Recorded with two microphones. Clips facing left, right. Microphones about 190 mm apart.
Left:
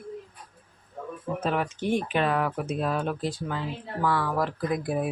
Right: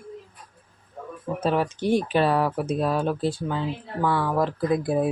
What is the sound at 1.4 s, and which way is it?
Speech, 35° right (ahead or behind).